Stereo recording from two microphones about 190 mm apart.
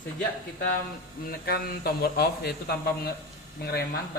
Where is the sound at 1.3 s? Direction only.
55° left (ahead or behind).